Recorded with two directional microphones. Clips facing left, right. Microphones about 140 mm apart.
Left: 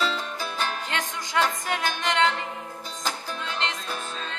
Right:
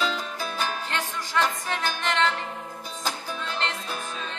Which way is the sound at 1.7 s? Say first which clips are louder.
Left 1 dB; 15° left (ahead or behind).